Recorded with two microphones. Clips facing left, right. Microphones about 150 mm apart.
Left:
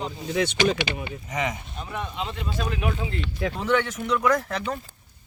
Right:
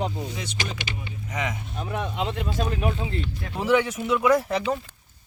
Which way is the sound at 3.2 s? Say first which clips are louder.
Left 5 dB; 90° left.